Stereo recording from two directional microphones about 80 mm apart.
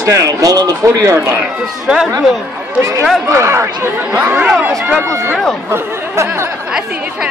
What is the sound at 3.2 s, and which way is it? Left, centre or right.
Speech, right.